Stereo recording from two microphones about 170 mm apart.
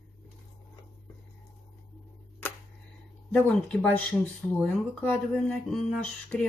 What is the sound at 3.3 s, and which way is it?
Speech, 5° left (ahead or behind).